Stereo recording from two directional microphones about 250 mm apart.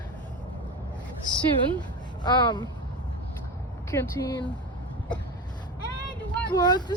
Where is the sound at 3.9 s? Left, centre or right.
Centre.